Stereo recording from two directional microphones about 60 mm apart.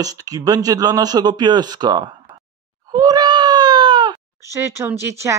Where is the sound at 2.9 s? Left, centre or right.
Right.